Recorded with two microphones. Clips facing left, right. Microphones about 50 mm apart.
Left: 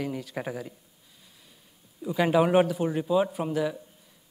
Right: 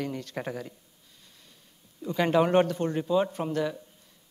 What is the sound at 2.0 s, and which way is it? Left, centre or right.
A man's voice, centre.